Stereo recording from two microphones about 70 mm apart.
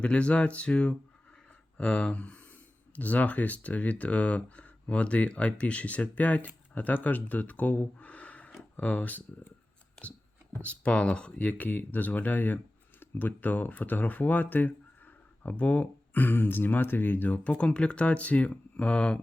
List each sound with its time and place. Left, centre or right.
0.0 s speech: centre
10.6 s speech: centre